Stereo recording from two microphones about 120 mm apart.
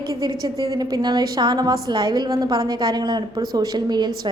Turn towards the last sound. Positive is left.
turn(degrees=-35)  # may be behind; listen again after turning